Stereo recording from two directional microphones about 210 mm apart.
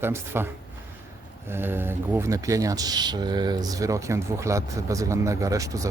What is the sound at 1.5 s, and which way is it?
Speech, 10° right (ahead or behind).